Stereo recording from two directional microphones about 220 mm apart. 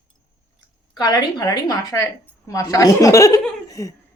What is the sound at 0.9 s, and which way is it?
A woman's voice, 20° left (ahead or behind).